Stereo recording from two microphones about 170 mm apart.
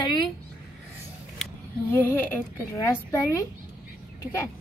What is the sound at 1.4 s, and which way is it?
A woman's voice, 10° left (ahead or behind).